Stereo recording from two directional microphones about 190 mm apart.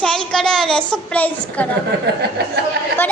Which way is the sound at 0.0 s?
5° left (ahead or behind).